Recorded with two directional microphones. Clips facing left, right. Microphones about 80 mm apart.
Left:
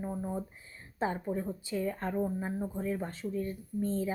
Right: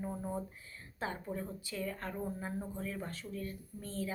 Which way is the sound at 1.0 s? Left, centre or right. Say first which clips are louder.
Left 7 dB; left.